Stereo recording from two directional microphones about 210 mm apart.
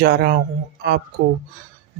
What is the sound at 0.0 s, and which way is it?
Speech, 45° right (ahead or behind).